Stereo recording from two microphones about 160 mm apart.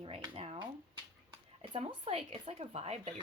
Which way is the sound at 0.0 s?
35° right (ahead or behind).